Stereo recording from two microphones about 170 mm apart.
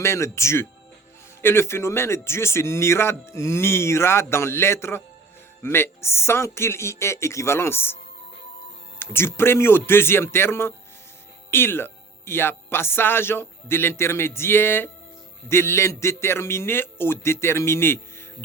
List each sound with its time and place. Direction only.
0.0 s a man's voice: 15° left (ahead or behind)
9.0 s a man's voice: 15° left (ahead or behind)